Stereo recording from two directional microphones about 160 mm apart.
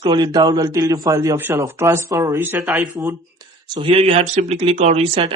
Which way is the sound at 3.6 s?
30° right (ahead or behind).